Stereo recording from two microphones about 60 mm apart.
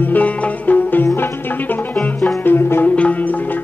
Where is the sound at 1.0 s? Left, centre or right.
Left.